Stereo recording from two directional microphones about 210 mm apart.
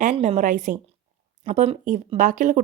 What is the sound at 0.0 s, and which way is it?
Speech, 35° right (ahead or behind).